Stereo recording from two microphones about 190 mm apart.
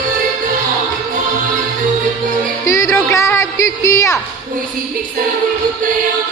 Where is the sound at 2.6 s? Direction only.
15° left (ahead or behind).